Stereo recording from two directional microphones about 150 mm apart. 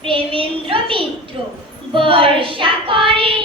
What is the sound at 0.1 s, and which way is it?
Child singing, 35° right (ahead or behind).